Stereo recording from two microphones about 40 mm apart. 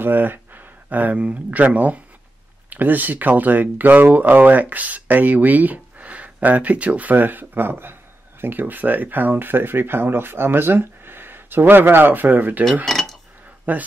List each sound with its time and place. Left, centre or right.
0.0 s speech: right
12.8 s dishes: centre
13.7 s speech: right